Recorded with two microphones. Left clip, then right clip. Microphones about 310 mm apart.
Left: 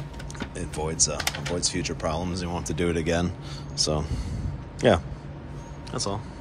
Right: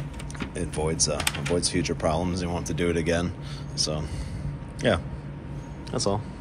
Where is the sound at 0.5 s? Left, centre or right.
Centre.